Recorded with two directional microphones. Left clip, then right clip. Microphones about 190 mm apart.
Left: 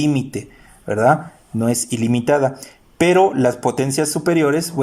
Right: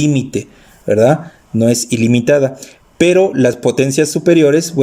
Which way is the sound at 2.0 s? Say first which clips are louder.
Right 4 dB; 15° right (ahead or behind).